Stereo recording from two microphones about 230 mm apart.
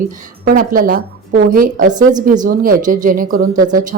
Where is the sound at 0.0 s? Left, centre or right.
Right.